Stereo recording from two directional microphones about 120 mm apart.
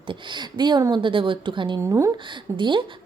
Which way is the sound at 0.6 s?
40° right (ahead or behind).